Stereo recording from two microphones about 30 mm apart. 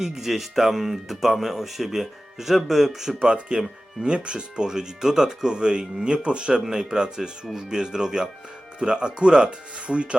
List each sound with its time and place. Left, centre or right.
0.0 s speech: centre
3.5 s speech: right